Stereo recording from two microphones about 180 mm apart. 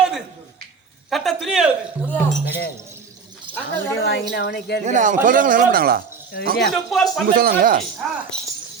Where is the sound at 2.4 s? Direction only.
65° left (ahead or behind).